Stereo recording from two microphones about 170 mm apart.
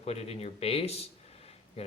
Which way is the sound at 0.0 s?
40° left (ahead or behind).